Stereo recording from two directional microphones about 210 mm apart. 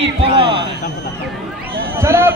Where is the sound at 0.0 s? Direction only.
30° right (ahead or behind).